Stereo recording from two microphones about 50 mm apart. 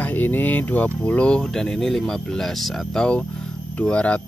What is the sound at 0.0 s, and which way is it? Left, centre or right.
Speech, left.